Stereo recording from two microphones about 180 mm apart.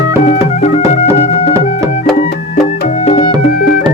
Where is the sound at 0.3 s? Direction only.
40° left (ahead or behind).